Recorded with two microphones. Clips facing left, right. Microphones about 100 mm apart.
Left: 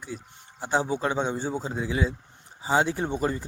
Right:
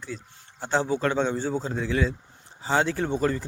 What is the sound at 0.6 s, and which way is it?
A man's voice, 10° left (ahead or behind).